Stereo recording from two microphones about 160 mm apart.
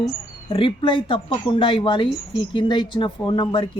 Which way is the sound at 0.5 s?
30° left (ahead or behind).